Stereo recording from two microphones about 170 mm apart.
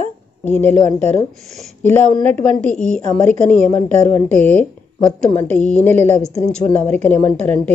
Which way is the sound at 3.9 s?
40° right (ahead or behind).